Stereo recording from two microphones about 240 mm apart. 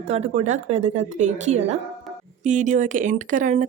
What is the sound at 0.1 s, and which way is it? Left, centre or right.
A woman's voice, right.